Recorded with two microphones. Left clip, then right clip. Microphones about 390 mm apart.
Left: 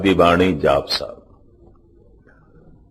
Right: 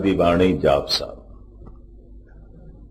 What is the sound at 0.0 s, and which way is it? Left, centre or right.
Speech, centre.